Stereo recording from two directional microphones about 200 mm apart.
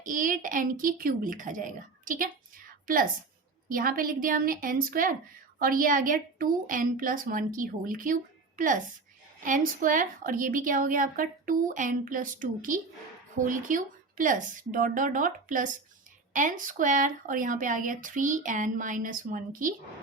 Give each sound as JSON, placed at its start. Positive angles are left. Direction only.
{"t": 0.0, "sound": "a woman's voice", "side_deg": -40}